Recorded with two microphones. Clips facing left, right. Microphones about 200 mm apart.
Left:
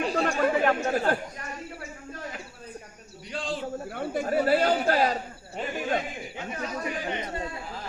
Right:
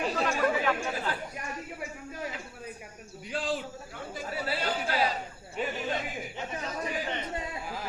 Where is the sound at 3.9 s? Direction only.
60° left (ahead or behind).